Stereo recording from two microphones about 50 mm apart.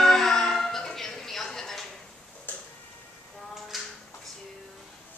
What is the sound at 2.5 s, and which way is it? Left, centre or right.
Tick-tock, left.